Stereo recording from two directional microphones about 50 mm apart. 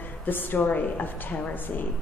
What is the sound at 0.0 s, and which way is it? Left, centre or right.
A woman's voice, left.